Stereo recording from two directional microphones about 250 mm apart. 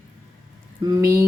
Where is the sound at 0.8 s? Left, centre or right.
Centre.